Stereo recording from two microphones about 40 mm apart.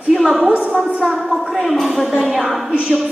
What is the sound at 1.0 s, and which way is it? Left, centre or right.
A woman's voice, centre.